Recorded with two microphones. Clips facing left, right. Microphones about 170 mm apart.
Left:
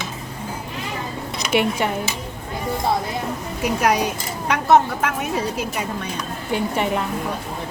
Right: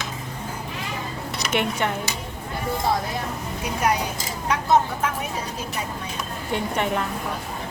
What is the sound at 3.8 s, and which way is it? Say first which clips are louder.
Speech: left 2 dB; 85° left.